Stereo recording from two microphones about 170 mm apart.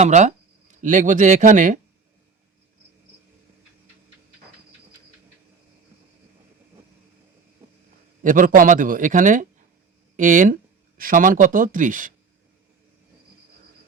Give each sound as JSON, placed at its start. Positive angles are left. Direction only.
{"t": 0.0, "sound": "speech", "side_deg": -45}
{"t": 8.2, "sound": "a man's voice", "side_deg": -50}